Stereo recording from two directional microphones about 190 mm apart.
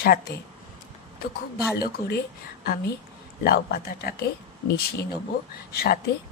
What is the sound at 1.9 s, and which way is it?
Speech, 55° left (ahead or behind).